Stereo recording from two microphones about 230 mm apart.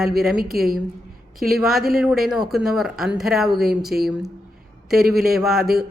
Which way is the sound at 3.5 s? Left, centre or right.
Right.